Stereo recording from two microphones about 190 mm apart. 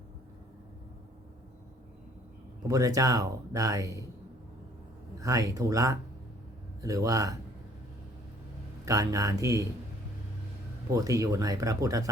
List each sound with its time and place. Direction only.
2.6 s speech: 15° right (ahead or behind)
5.2 s speech: 15° right (ahead or behind)
8.8 s speech: 15° right (ahead or behind)
10.9 s speech: 15° right (ahead or behind)